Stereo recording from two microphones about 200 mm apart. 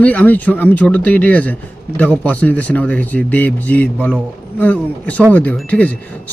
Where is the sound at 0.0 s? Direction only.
10° left (ahead or behind).